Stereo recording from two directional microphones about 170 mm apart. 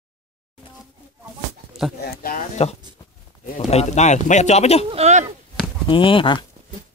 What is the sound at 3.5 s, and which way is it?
Speech, 40° left (ahead or behind).